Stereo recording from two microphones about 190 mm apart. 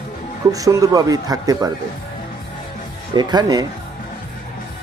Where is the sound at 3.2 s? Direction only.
20° right (ahead or behind).